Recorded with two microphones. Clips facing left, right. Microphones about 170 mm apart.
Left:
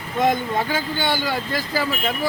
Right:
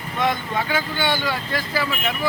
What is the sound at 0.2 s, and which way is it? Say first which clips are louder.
Speech: left 3 dB; 45° left (ahead or behind).